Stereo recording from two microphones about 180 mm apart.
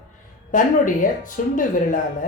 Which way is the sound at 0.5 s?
45° left (ahead or behind).